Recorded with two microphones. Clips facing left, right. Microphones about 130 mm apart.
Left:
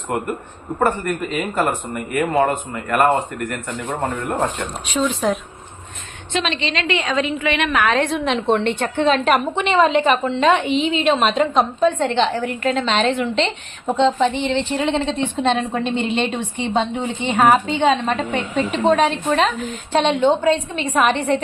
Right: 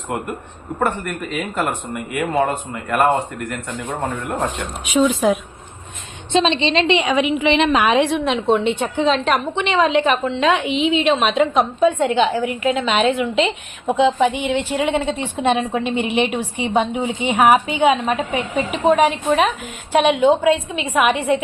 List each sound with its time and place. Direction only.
0.8 s a woman's voice: centre (ahead or behind)
4.9 s a woman's voice: 5° right (ahead or behind)
6.3 s a woman's voice: 25° right (ahead or behind)
7.0 s a woman's voice: 15° right (ahead or behind)
8.0 s a woman's voice: 5° right (ahead or behind)